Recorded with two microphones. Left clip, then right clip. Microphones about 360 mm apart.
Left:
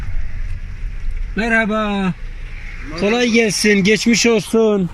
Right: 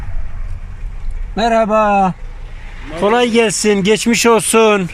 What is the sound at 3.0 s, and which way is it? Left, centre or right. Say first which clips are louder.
Speech: right 3 dB; right.